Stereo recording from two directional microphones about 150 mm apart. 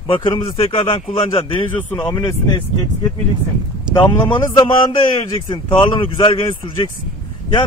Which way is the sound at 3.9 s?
5° right (ahead or behind).